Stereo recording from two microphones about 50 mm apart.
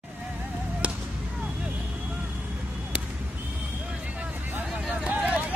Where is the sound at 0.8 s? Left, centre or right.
Right.